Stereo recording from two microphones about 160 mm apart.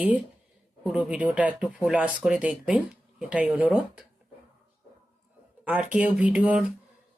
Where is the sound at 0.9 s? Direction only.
10° right (ahead or behind).